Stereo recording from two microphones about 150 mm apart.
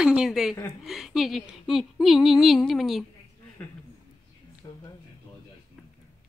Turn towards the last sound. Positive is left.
turn(degrees=25)  # may be behind; listen again after turning